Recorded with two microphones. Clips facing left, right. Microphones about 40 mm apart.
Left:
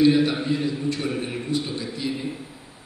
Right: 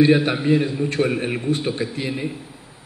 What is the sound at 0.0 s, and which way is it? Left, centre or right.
A man's voice, right.